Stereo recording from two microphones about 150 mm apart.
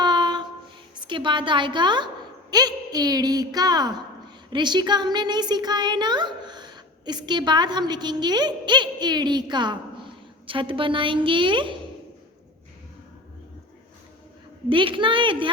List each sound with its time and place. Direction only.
0.0 s a sound: 30° right (ahead or behind)
1.0 s a woman's voice: 30° right (ahead or behind)
14.7 s a woman's voice: 35° right (ahead or behind)